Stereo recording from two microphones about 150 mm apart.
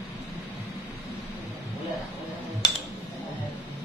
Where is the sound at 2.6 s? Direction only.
25° left (ahead or behind).